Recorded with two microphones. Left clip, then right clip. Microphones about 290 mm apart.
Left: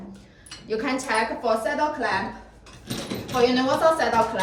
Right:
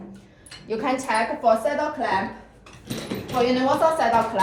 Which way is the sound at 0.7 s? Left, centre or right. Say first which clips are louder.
Right 2 dB; centre.